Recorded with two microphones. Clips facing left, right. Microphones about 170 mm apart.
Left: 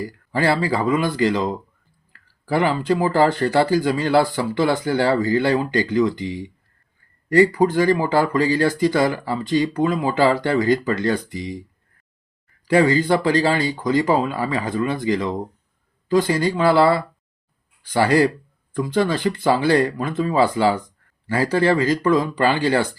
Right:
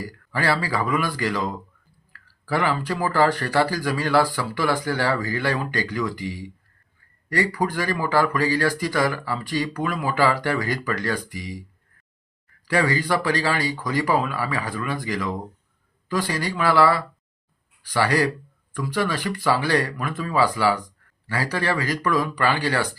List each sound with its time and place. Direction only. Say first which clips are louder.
0.0 s speech: left 5 dB; 25° left (ahead or behind)
12.6 s speech: left 6 dB; 25° left (ahead or behind)